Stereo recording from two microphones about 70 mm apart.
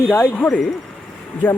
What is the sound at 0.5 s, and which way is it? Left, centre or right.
Speech, centre.